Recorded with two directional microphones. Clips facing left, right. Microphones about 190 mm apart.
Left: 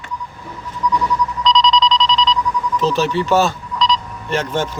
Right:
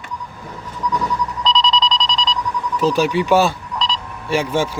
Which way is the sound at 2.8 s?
10° right (ahead or behind).